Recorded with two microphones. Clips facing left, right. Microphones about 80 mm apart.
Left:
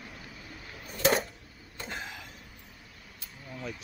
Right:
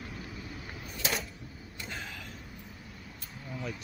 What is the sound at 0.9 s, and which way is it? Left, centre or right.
Typewriter, left.